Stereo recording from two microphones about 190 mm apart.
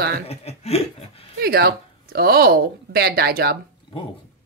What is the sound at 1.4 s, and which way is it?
Speech, 55° right (ahead or behind).